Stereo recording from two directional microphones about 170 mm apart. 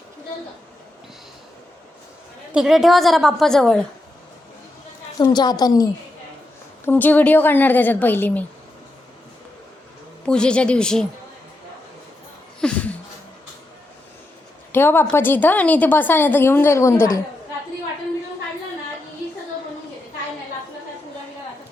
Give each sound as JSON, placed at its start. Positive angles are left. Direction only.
{"t": 2.5, "sound": "a woman's voice", "side_deg": -5}
{"t": 5.2, "sound": "a woman's voice", "side_deg": 25}
{"t": 6.8, "sound": "a woman's voice", "side_deg": 10}
{"t": 10.2, "sound": "a woman's voice", "side_deg": 5}
{"t": 12.5, "sound": "a sound", "side_deg": 5}
{"t": 14.7, "sound": "a woman's voice", "side_deg": 15}